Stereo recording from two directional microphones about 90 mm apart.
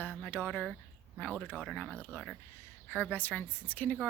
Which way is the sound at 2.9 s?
15° left (ahead or behind).